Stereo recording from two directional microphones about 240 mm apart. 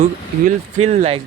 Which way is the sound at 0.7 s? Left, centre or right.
Right.